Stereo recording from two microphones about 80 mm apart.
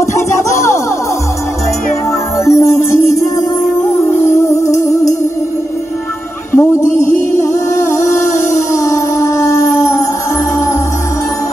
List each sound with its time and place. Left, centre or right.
2.3 s music: left
4.5 s music: left
6.5 s music: left
8.8 s music: left